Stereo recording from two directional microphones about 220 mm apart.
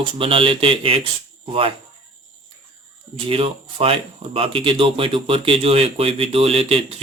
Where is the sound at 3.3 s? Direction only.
25° right (ahead or behind).